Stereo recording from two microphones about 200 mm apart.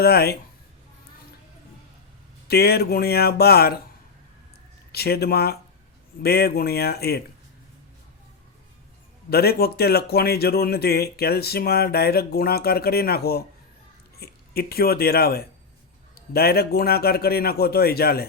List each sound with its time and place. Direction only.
0.0 s speech: 50° left (ahead or behind)
2.5 s speech: 50° left (ahead or behind)
4.9 s speech: 50° left (ahead or behind)
9.3 s speech: 50° left (ahead or behind)